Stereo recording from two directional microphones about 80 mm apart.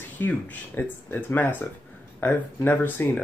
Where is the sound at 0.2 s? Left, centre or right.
Left.